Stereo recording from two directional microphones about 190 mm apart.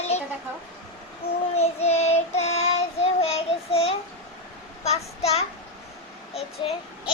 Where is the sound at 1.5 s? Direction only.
35° left (ahead or behind).